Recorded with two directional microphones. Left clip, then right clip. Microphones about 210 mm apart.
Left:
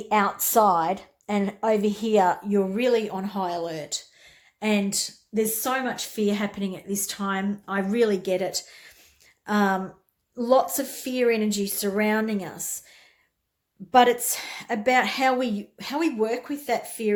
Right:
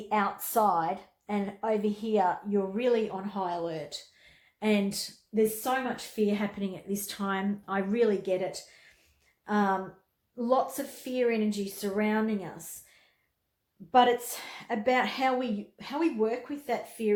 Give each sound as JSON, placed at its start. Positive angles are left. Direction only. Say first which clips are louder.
{"t": 0.1, "sound": "a woman's voice", "louder": "left 6 dB", "side_deg": 45}
{"t": 13.9, "sound": "a woman's voice", "louder": "left 5 dB", "side_deg": 30}